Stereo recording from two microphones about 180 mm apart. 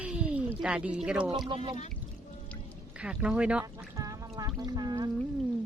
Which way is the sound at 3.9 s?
20° right (ahead or behind).